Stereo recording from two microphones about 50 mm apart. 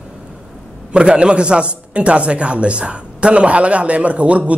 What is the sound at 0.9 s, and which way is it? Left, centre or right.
A man's voice, right.